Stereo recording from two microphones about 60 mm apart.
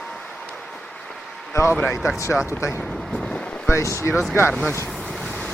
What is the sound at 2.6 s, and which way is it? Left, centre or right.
Speech, left.